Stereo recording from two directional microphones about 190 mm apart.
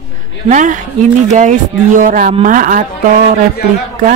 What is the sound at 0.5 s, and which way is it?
Speech, 40° right (ahead or behind).